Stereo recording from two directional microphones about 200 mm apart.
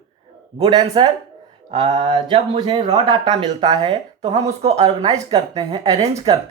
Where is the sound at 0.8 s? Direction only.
30° right (ahead or behind).